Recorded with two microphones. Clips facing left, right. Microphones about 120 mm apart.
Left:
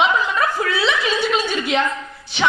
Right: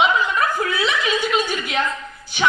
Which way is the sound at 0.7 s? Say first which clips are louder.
Left 1 dB; 30° left (ahead or behind).